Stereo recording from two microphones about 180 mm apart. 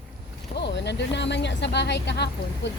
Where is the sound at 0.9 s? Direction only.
75° left (ahead or behind).